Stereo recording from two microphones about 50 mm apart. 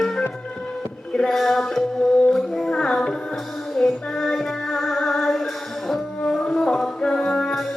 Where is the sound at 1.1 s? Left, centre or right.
Centre.